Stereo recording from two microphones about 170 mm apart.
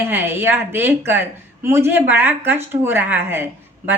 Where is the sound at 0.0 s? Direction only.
15° right (ahead or behind).